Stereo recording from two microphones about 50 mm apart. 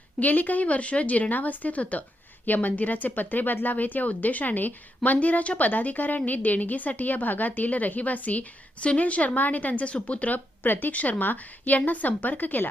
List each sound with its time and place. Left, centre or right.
0.2 s speech: left